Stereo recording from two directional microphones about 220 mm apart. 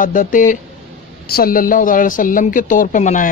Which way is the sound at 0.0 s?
35° left (ahead or behind).